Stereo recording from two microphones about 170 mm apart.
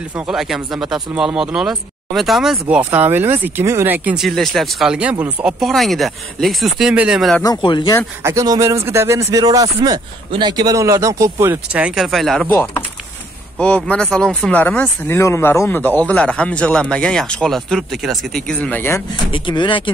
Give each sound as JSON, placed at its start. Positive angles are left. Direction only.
{"t": 0.3, "sound": "speech", "side_deg": 0}
{"t": 7.4, "sound": "speech", "side_deg": 25}
{"t": 8.2, "sound": "speech", "side_deg": -15}
{"t": 12.4, "sound": "speech", "side_deg": 15}
{"t": 19.3, "sound": "speech", "side_deg": 30}